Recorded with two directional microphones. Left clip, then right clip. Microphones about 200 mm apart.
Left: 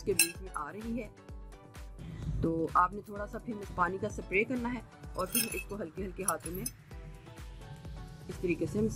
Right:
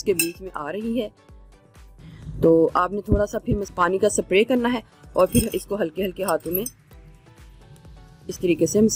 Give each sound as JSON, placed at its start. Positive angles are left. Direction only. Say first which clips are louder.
{"t": 0.0, "sound": "speech", "louder": "right 9 dB", "side_deg": -45}
{"t": 2.4, "sound": "speech", "louder": "right 12 dB", "side_deg": -45}
{"t": 8.4, "sound": "speech", "louder": "right 14 dB", "side_deg": -45}